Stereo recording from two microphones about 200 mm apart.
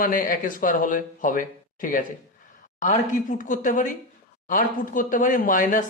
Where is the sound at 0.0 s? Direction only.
45° left (ahead or behind).